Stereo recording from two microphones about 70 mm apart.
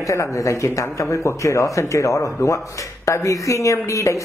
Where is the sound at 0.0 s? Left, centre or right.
Left.